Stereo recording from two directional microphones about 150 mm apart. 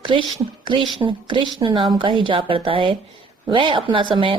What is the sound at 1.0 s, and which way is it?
A woman's voice, 30° right (ahead or behind).